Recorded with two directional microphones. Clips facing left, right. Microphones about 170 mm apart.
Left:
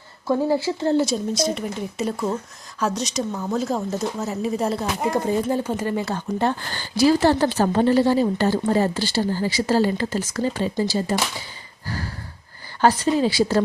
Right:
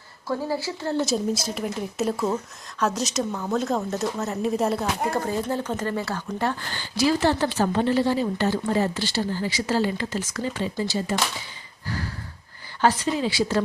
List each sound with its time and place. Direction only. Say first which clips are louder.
0.3 s speech: left 6 dB; 20° left (ahead or behind)
1.0 s speech: left 2 dB; centre (ahead or behind)
5.1 s speech: left 4 dB; 20° left (ahead or behind)
6.7 s a woman's voice: left 5 dB; 35° left (ahead or behind)
12.8 s a woman's voice: left 4 dB; 35° left (ahead or behind)